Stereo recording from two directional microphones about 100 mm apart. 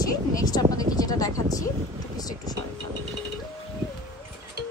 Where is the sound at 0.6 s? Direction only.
35° left (ahead or behind).